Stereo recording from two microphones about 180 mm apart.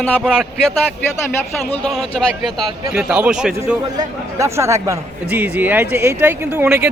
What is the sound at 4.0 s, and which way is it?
A man's voice, 15° right (ahead or behind).